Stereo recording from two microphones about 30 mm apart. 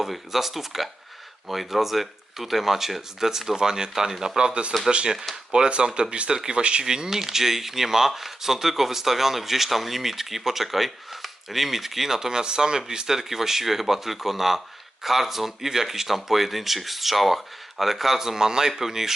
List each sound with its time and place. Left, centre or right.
0.0 s speech: centre
4.4 s speech: right
4.9 s speech: centre
5.5 s speech: right
6.8 s speech: right
13.1 s speech: centre